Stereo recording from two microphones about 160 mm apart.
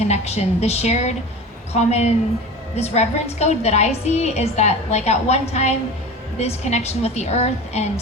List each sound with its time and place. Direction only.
0.0 s a woman's voice: 40° left (ahead or behind)